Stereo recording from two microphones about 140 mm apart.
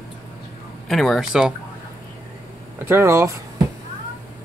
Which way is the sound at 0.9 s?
Centre (ahead or behind).